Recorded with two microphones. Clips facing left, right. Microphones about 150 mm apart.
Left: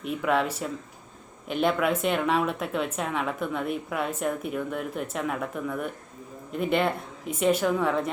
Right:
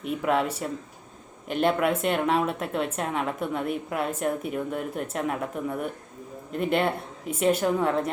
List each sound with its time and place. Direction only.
0.0 s a woman's voice: centre (ahead or behind)